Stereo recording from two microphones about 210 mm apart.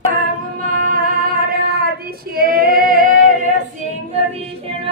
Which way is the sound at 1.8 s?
45° right (ahead or behind).